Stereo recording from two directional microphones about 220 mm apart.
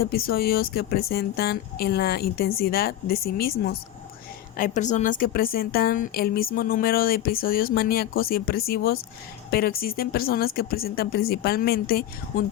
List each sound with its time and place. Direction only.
0.0 s a woman's voice: 45° left (ahead or behind)